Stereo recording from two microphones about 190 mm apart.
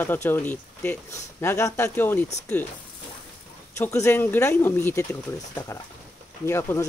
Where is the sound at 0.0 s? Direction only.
10° left (ahead or behind).